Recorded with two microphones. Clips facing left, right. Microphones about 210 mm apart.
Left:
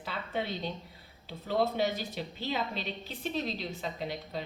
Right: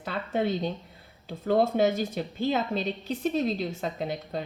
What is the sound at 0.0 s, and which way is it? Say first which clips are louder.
A woman's voice: right 7 dB; 45° right (ahead or behind).